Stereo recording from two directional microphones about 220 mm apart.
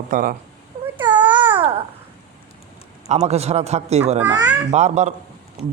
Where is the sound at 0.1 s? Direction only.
40° right (ahead or behind).